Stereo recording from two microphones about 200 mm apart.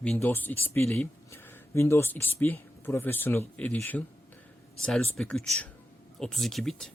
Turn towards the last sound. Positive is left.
turn(degrees=0)  # may be behind; listen again after turning